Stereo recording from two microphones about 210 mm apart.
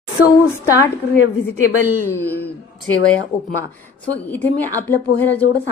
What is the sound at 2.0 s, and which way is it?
A woman's voice, 10° left (ahead or behind).